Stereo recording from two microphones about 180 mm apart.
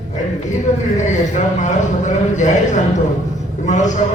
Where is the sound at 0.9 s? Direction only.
45° left (ahead or behind).